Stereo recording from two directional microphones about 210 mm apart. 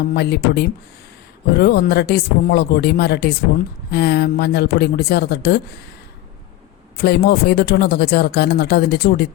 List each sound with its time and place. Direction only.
0.1 s speech: 50° left (ahead or behind)
6.9 s speech: 50° left (ahead or behind)